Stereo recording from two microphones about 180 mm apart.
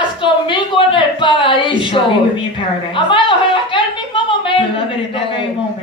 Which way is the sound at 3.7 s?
25° left (ahead or behind).